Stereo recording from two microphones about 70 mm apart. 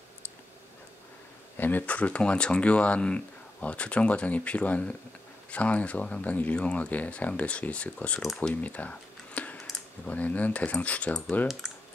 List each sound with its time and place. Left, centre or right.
1.6 s speech: left
8.5 s computer keyboard: left
10.0 s speech: left